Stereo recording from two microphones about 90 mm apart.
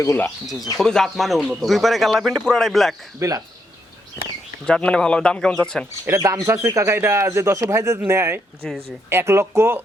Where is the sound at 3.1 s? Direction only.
40° right (ahead or behind).